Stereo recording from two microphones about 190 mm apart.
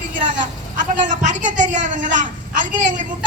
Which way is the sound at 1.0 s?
40° right (ahead or behind).